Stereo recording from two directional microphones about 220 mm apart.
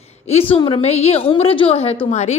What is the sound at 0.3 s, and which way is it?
Speech, 25° left (ahead or behind).